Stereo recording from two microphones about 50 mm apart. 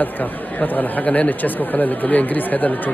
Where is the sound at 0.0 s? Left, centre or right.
Left.